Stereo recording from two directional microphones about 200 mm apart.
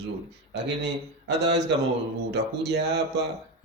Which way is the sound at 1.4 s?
60° right (ahead or behind).